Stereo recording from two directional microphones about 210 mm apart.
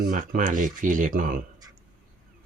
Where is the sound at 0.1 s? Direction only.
40° right (ahead or behind).